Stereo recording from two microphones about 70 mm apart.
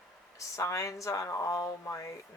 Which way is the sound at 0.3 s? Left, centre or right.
Left.